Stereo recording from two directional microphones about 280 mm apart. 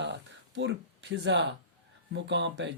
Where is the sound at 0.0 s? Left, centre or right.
Right.